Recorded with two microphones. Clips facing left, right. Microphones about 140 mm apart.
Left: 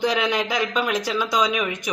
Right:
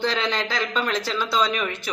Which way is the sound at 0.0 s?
15° left (ahead or behind).